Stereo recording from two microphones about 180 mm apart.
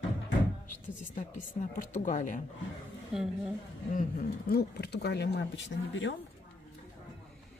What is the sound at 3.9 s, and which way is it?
Speech, 50° left (ahead or behind).